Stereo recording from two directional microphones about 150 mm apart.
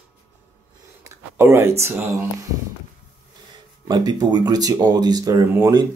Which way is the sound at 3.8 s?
30° right (ahead or behind).